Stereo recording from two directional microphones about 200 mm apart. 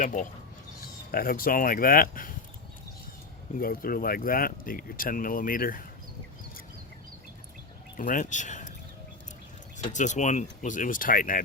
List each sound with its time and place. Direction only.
0.0 s speech: 40° left (ahead or behind)
3.6 s speech: 45° left (ahead or behind)
7.9 s speech: 40° left (ahead or behind)
9.7 s speech: 35° left (ahead or behind)